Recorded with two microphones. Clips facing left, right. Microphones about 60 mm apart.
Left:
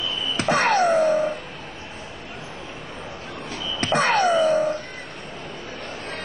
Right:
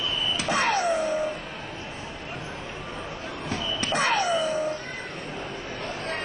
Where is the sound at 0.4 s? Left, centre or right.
Left.